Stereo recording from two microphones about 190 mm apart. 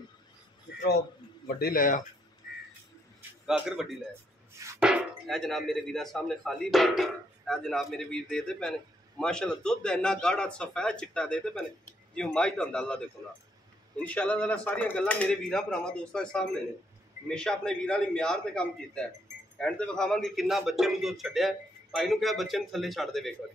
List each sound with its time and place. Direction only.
1.6 s speech: 50° left (ahead or behind)
3.2 s a sound: 5° right (ahead or behind)
4.7 s speech: 5° right (ahead or behind)